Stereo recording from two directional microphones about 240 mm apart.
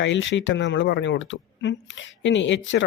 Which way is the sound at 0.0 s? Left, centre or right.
Left.